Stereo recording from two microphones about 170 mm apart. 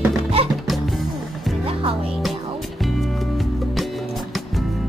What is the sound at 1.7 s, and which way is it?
Music, 35° right (ahead or behind).